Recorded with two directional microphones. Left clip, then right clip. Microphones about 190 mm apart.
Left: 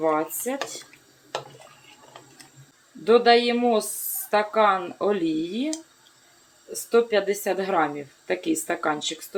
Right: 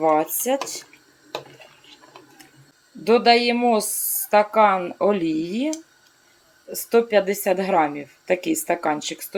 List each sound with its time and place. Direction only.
0.0 s speech: 35° right (ahead or behind)
3.0 s a woman's voice: 20° right (ahead or behind)
6.9 s a woman's voice: 25° right (ahead or behind)